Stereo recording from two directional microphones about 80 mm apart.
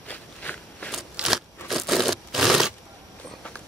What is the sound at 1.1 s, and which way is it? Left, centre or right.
Crunch, centre.